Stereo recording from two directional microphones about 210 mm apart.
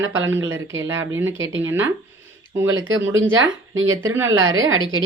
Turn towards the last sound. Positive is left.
turn(degrees=-70)  # may be behind; listen again after turning